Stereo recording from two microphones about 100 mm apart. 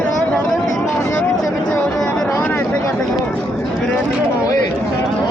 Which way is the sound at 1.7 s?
5° left (ahead or behind).